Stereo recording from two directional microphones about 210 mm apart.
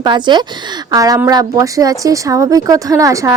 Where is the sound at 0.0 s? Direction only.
20° right (ahead or behind).